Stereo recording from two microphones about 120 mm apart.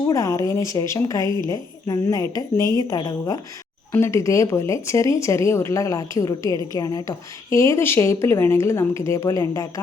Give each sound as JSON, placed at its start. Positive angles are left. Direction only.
{"t": 0.1, "sound": "a woman's voice", "side_deg": 25}